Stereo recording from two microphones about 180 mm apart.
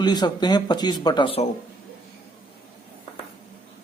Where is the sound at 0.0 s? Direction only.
25° left (ahead or behind).